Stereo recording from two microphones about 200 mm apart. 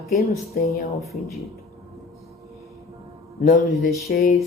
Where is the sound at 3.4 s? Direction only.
45° left (ahead or behind).